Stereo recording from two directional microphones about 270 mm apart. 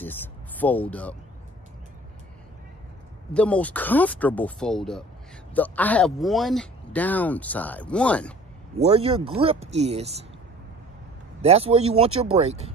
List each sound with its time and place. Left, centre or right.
0.0 s speech: centre
3.3 s speech: centre
8.7 s speech: right
11.4 s speech: right